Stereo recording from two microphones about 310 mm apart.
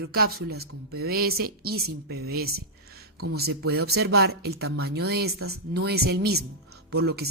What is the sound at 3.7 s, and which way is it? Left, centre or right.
Speech, right.